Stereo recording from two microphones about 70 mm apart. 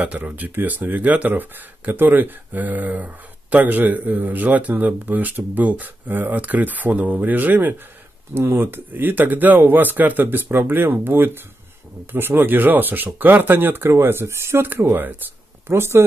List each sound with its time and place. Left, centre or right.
0.0 s speech: centre; by 16.0 s right